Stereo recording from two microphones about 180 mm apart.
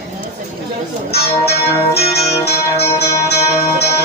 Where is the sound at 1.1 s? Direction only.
65° left (ahead or behind).